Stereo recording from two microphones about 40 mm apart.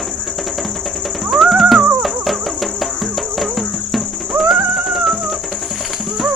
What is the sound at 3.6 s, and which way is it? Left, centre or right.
Insect, centre.